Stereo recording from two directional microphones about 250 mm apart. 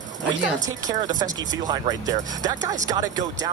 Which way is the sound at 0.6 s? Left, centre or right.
Centre.